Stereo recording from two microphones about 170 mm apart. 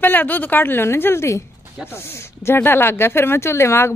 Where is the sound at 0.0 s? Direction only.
10° left (ahead or behind).